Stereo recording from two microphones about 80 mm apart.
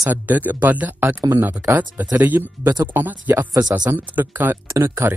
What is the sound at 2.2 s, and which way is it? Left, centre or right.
Speech, right.